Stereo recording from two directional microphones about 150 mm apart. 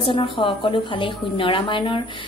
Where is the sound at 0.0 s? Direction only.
35° left (ahead or behind).